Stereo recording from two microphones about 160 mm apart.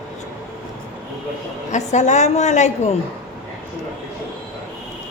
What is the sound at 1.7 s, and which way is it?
A woman's voice, 45° left (ahead or behind).